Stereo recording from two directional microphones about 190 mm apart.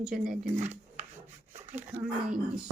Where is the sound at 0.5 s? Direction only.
40° right (ahead or behind).